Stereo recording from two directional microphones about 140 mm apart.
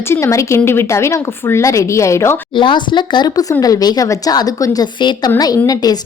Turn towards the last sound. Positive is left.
turn(degrees=30)  # may be behind; listen again after turning